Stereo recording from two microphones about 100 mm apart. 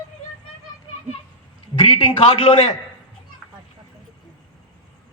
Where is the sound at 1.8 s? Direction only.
60° left (ahead or behind).